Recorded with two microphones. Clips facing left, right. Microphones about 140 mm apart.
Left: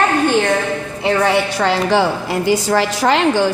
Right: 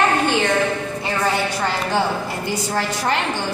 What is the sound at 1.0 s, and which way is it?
A woman's voice, 70° left (ahead or behind).